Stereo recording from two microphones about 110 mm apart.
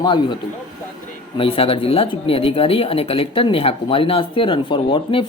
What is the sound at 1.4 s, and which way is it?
Speech, 60° left (ahead or behind).